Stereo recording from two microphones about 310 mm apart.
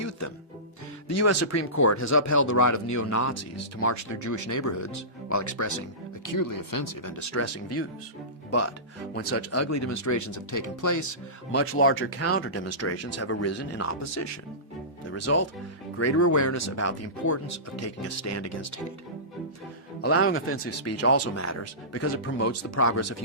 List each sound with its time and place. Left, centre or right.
1.0 s speech: left
6.2 s speech: left
11.5 s speech: left
20.0 s speech: left